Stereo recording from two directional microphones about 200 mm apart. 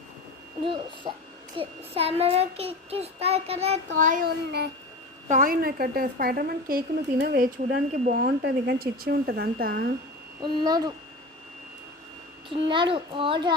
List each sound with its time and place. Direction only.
0.6 s speech: 25° right (ahead or behind)
1.5 s child singing: 30° right (ahead or behind); by 4.7 s 50° right (ahead or behind)
5.3 s a woman's voice: 45° right (ahead or behind)
10.4 s a child's voice: 20° right (ahead or behind)
12.5 s a child's voice: 25° right (ahead or behind)